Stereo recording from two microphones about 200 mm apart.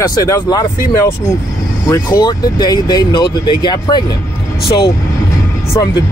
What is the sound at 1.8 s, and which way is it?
Speech, 15° left (ahead or behind).